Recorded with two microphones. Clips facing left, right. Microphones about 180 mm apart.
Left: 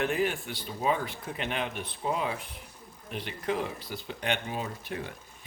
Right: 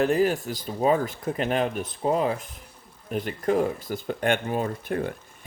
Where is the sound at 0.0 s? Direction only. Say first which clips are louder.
Right 7 dB; 40° right (ahead or behind).